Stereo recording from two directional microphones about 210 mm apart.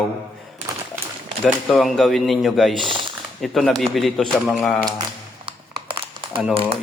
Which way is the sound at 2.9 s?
25° right (ahead or behind).